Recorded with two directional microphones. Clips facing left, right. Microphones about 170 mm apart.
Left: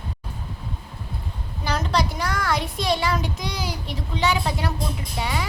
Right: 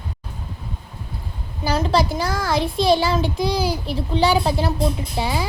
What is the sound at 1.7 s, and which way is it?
Speech, 30° right (ahead or behind).